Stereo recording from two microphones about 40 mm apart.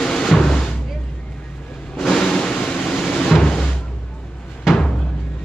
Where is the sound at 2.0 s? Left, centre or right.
Centre.